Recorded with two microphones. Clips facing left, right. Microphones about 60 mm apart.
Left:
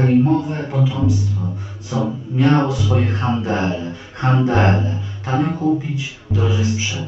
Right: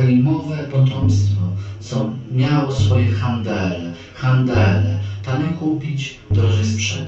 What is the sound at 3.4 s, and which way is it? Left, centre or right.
Music, left.